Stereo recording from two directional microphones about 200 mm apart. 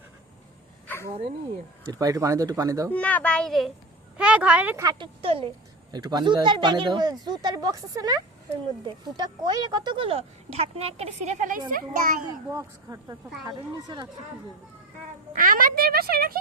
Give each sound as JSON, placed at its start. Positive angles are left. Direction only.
{"t": 1.9, "sound": "speech", "side_deg": -15}
{"t": 2.9, "sound": "a child's voice", "side_deg": 5}
{"t": 12.5, "sound": "speech", "side_deg": -15}
{"t": 15.3, "sound": "speech", "side_deg": -45}